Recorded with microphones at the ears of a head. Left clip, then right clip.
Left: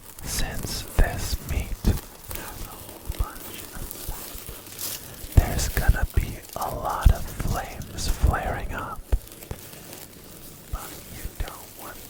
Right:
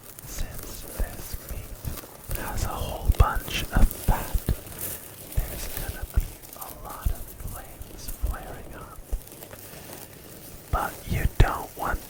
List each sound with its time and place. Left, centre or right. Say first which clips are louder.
0.3 s whispering: left 9 dB; left
2.5 s whispering: right 8 dB; right
4.8 s whispering: left 4 dB; left
10.7 s whispering: right 11 dB; right